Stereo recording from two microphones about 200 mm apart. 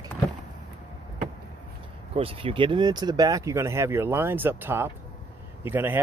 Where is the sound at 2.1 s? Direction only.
25° right (ahead or behind); by 6.0 s 10° right (ahead or behind).